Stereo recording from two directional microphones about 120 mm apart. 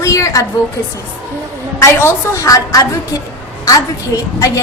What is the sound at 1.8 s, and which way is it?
A woman's voice, 25° left (ahead or behind).